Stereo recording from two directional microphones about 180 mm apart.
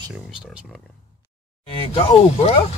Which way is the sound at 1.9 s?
30° left (ahead or behind).